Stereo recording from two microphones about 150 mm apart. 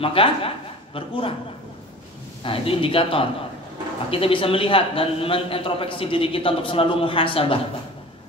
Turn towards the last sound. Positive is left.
turn(degrees=35)  # may be behind; listen again after turning